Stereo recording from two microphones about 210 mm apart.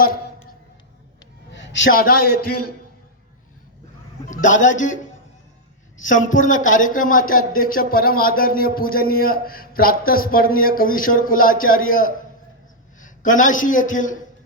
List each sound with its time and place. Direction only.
1.9 s speech: 45° left (ahead or behind)
4.3 s a man's voice: 35° left (ahead or behind)
6.1 s a man's voice: 40° left (ahead or behind)